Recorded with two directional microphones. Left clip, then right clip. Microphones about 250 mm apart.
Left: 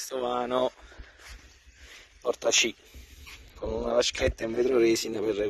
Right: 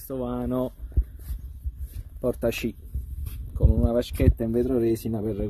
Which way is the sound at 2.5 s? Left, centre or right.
Centre.